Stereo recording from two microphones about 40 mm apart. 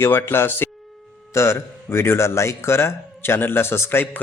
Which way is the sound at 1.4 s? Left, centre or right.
Left.